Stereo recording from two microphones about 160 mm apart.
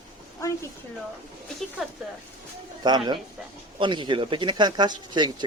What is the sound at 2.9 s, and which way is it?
Speech, 25° right (ahead or behind).